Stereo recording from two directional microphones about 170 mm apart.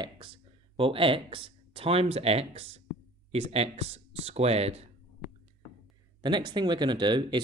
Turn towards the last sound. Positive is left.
turn(degrees=-25)  # may be behind; listen again after turning